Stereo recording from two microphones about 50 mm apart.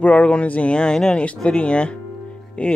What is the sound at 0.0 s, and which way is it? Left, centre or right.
Speech, left.